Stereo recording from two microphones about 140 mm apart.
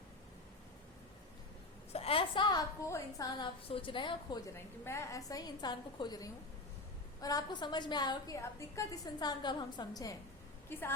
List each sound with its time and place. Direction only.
1.9 s a sound: 45° left (ahead or behind)
2.8 s a woman's voice: 20° left (ahead or behind)
4.9 s a woman's voice: 20° left (ahead or behind)